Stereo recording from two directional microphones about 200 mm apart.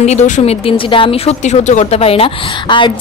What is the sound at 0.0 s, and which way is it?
Speech, 35° left (ahead or behind).